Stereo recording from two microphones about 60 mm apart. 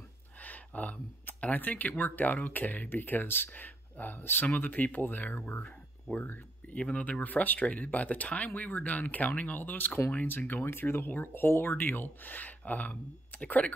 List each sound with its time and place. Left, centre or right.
0.4 s speech: left
6.7 s speech: left